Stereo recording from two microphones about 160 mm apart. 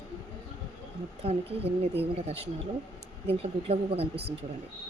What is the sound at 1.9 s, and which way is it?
Speech, 40° right (ahead or behind).